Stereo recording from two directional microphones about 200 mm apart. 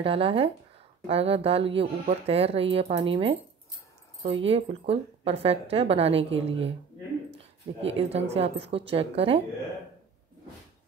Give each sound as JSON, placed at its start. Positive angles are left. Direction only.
{"t": 0.0, "sound": "speech", "side_deg": -25}